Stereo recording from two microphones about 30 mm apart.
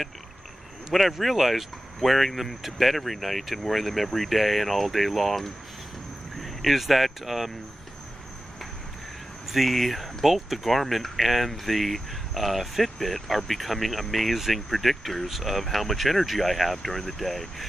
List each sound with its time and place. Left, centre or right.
1.1 s speech: centre
9.5 s speech: centre